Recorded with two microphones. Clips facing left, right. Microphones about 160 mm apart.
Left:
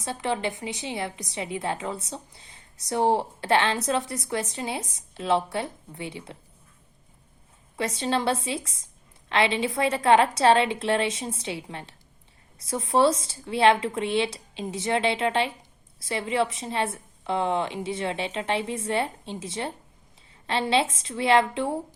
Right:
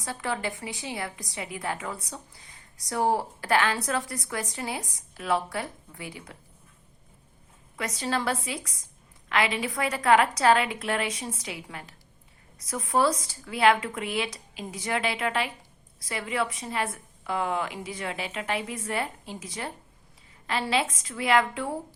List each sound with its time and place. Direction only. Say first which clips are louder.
0.0 s a woman's voice: left 3 dB; 25° left (ahead or behind)
7.8 s a woman's voice: left 3 dB; 25° left (ahead or behind)